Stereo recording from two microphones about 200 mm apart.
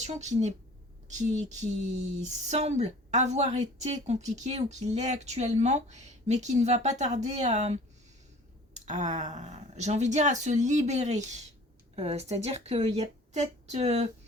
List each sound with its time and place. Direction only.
0.0 s speech: 35° right (ahead or behind)